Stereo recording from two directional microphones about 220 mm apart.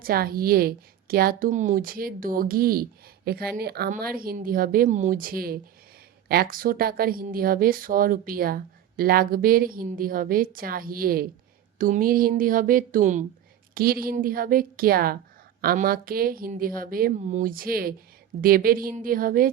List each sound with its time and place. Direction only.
0.0 s speech: 45° right (ahead or behind)